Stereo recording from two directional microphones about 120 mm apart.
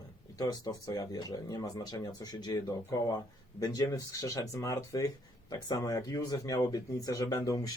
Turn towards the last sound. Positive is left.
turn(degrees=30)  # may be behind; listen again after turning